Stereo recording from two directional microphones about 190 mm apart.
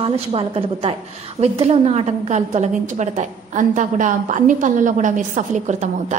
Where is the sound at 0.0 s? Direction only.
30° right (ahead or behind).